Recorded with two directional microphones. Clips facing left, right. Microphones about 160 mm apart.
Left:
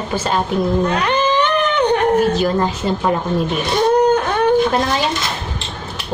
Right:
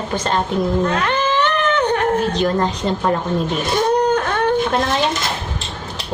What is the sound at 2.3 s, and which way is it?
Speech, 5° left (ahead or behind).